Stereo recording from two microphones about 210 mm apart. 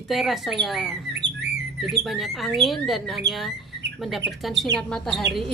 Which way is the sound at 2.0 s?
Centre (ahead or behind).